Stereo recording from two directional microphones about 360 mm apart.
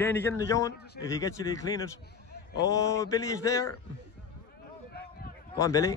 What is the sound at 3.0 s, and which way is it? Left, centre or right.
Speech, centre.